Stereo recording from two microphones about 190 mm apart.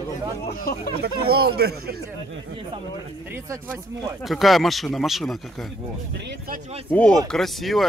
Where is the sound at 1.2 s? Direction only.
55° right (ahead or behind).